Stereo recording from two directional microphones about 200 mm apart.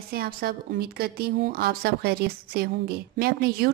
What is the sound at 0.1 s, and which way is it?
A woman's voice, 50° right (ahead or behind).